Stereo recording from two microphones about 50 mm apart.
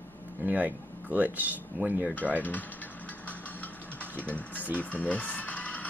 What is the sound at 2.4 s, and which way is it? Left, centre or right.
Speech, left.